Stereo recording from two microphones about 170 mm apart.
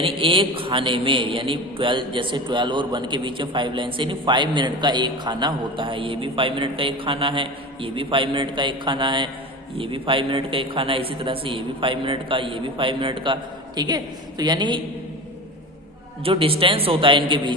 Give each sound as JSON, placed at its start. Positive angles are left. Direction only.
{"t": 0.0, "sound": "a man's voice", "side_deg": -30}
{"t": 16.2, "sound": "a man's voice", "side_deg": -35}